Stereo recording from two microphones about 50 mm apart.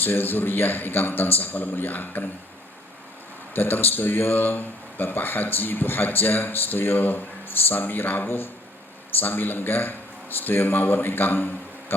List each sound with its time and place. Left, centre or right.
0.0 s speech: left
3.5 s a man's voice: left